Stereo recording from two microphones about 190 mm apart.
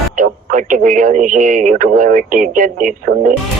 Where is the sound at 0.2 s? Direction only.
45° right (ahead or behind).